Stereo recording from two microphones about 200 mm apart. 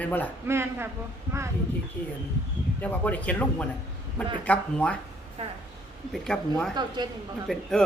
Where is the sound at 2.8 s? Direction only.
5° left (ahead or behind).